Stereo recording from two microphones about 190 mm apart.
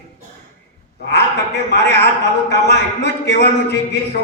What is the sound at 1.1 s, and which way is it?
Speech, 60° left (ahead or behind).